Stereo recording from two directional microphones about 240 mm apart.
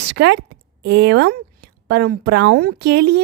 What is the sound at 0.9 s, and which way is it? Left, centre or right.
A woman's voice, right.